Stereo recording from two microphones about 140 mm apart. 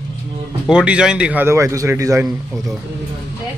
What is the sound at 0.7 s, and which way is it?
A man's voice, 5° right (ahead or behind).